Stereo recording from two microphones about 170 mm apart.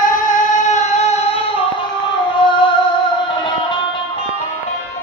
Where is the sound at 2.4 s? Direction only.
30° left (ahead or behind).